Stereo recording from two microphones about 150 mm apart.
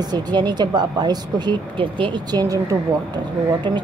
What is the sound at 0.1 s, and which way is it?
Speech, 30° right (ahead or behind).